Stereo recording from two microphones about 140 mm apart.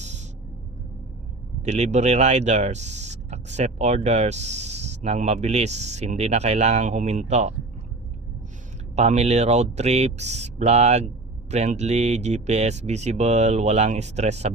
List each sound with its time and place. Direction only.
0.0 s a sound: 55° right (ahead or behind)
1.6 s speech: 55° right (ahead or behind)
9.0 s speech: 50° right (ahead or behind)